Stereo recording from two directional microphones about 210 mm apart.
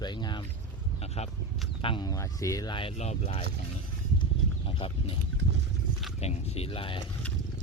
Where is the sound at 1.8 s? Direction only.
20° left (ahead or behind).